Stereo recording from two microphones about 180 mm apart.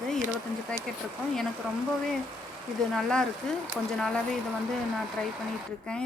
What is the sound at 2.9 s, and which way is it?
Speech, 5° left (ahead or behind).